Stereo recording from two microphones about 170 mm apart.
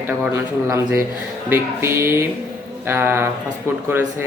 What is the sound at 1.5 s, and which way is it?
Speech, 15° right (ahead or behind).